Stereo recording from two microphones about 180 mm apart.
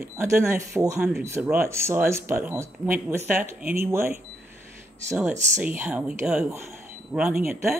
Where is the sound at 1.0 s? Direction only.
5° right (ahead or behind).